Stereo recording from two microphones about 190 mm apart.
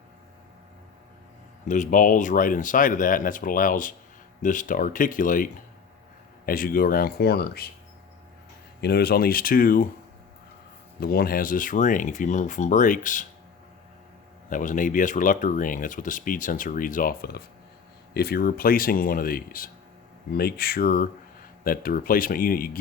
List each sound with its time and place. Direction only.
1.6 s speech: 40° left (ahead or behind); by 7.7 s 55° left (ahead or behind)
8.8 s speech: 55° left (ahead or behind)
11.0 s speech: 55° left (ahead or behind)
14.5 s speech: 45° left (ahead or behind)